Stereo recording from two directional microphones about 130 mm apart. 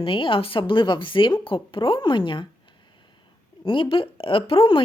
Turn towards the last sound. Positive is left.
turn(degrees=45)  # may be behind; listen again after turning